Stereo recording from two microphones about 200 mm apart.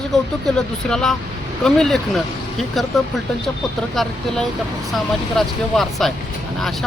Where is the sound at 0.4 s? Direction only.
5° left (ahead or behind).